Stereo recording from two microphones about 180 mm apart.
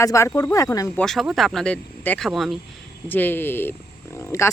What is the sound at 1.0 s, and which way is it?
A woman's voice, centre (ahead or behind).